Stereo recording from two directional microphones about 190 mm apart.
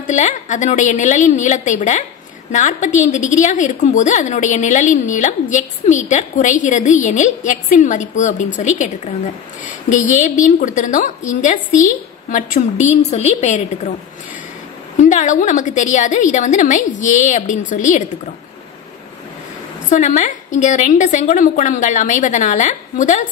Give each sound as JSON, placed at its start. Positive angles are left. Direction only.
{"t": 0.0, "sound": "a woman's voice", "side_deg": 40}
{"t": 15.0, "sound": "a woman's voice", "side_deg": 40}
{"t": 19.9, "sound": "a woman's voice", "side_deg": 40}